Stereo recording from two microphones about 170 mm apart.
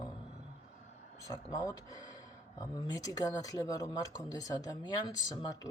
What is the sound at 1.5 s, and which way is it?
Speech, 20° left (ahead or behind).